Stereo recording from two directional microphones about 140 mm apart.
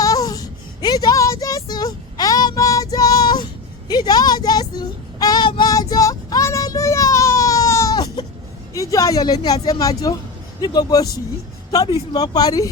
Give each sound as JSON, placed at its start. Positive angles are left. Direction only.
{"t": 0.0, "sound": "a sound", "side_deg": 25}
{"t": 3.8, "sound": "child singing", "side_deg": 30}
{"t": 8.7, "sound": "speech", "side_deg": 25}
{"t": 12.1, "sound": "speech", "side_deg": 30}